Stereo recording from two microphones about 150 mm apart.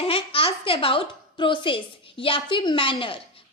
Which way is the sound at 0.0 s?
40° left (ahead or behind).